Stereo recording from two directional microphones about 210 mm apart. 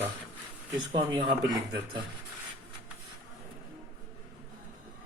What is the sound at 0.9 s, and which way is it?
A man's voice, 20° right (ahead or behind).